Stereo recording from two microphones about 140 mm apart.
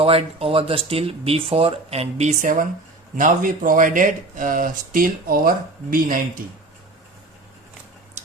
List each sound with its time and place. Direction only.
0.0 s speech: 45° right (ahead or behind); by 6.1 s 90° right